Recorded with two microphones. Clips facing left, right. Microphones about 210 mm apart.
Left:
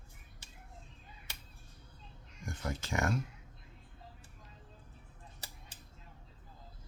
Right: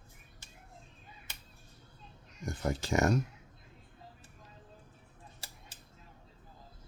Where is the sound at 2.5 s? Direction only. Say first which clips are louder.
Right 6 dB; 35° right (ahead or behind).